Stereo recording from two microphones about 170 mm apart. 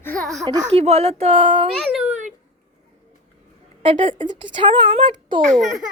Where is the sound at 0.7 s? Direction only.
35° right (ahead or behind).